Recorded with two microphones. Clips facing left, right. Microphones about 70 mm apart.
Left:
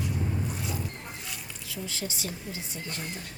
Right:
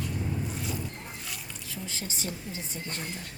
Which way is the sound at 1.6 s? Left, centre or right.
Right.